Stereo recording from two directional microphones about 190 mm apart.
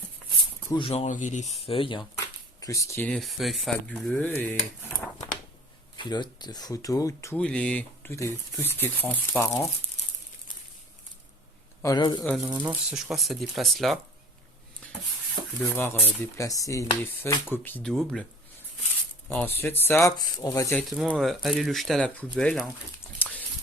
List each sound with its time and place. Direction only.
0.7 s speech: 30° left (ahead or behind); by 4.5 s 10° left (ahead or behind)
6.0 s speech: 25° left (ahead or behind)
11.8 s a man's voice: 20° left (ahead or behind)
12.5 s speech: 15° right (ahead or behind)
12.9 s speech: centre (ahead or behind)
15.6 s speech: 10° left (ahead or behind)
19.3 s speech: 5° left (ahead or behind)
20.9 s speech: centre (ahead or behind)
23.1 s a sound: 10° left (ahead or behind)